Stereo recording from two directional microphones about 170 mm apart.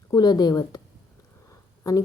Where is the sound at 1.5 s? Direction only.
20° left (ahead or behind).